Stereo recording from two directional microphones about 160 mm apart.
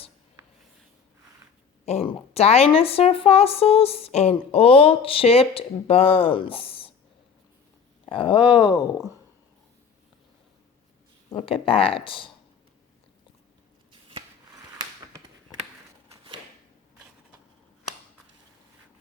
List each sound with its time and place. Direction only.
1.8 s a woman's voice: 40° left (ahead or behind)
8.0 s a woman's voice: 35° left (ahead or behind)
11.3 s a woman's voice: 35° left (ahead or behind)